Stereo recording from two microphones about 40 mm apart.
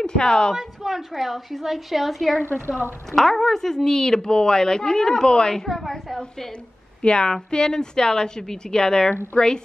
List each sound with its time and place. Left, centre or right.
0.0 s a woman's voice: centre
0.6 s a woman's voice: centre
5.7 s speech: centre
7.0 s a woman's voice: left